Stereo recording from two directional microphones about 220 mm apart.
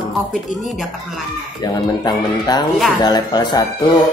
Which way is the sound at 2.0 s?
20° left (ahead or behind).